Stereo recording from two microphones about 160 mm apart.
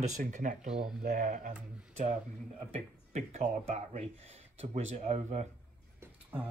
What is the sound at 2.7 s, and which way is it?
Speech, 45° right (ahead or behind).